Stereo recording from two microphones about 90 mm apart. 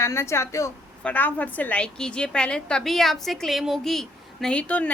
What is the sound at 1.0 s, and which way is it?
A woman's voice, 20° left (ahead or behind).